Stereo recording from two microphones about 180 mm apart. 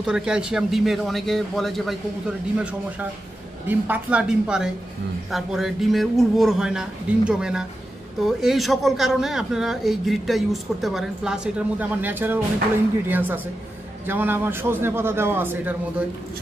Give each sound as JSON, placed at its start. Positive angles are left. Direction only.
{"t": 0.0, "sound": "a man's voice", "side_deg": -5}